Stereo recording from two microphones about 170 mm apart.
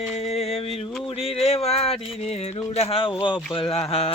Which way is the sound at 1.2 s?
35° left (ahead or behind).